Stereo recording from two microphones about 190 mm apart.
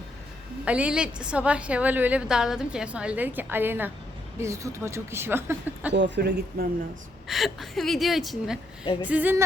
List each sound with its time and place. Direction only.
0.6 s a woman's voice: 5° right (ahead or behind)
5.9 s a man's voice: 65° right (ahead or behind)
7.3 s a woman's voice: centre (ahead or behind)